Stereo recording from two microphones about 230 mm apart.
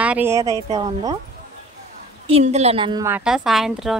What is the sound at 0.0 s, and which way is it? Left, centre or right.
Speech, centre.